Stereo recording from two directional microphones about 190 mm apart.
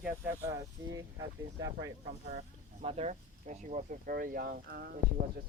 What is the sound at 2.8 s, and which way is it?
Speech, 35° right (ahead or behind).